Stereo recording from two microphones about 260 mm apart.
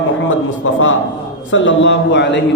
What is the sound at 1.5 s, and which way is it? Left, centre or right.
Speech, left.